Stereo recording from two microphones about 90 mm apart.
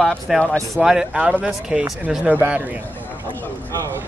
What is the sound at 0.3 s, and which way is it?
A man's voice, 5° right (ahead or behind).